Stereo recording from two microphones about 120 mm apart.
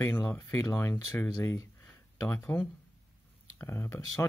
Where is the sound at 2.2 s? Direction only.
15° left (ahead or behind).